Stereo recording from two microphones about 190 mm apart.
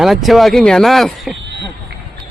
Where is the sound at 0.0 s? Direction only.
Centre (ahead or behind).